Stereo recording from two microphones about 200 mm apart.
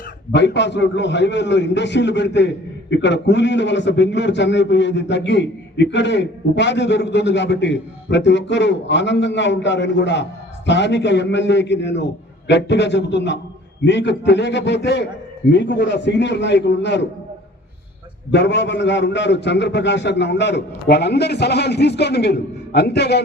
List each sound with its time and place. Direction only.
0.3 s a man's voice: 60° left (ahead or behind)
18.3 s a man's voice: 60° left (ahead or behind)